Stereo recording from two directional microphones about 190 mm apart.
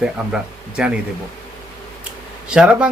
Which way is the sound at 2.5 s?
5° right (ahead or behind).